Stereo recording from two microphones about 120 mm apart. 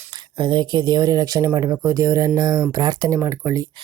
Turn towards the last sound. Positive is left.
turn(degrees=-25)  # may be behind; listen again after turning